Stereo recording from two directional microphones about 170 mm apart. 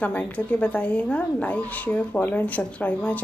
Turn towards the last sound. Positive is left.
turn(degrees=10)  # may be behind; listen again after turning